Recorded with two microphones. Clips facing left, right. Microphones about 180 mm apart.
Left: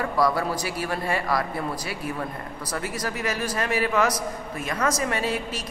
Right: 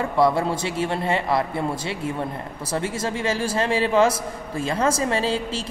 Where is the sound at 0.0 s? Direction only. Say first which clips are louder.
Right 3 dB; 25° right (ahead or behind).